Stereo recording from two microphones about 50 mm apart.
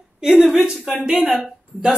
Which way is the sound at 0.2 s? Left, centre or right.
Centre.